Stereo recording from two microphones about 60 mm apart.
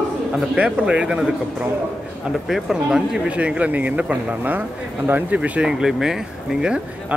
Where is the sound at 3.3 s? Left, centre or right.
Right.